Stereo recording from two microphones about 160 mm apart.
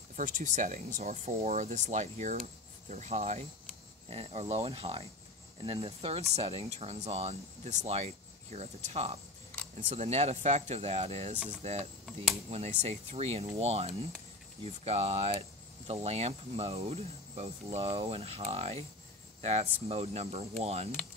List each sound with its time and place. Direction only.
0.1 s speech: 55° right (ahead or behind)